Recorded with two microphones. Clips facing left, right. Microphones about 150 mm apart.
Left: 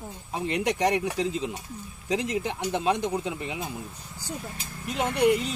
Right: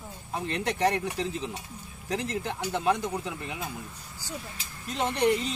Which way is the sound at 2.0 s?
15° left (ahead or behind).